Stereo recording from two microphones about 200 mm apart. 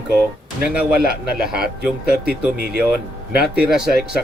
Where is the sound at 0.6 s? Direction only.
5° right (ahead or behind).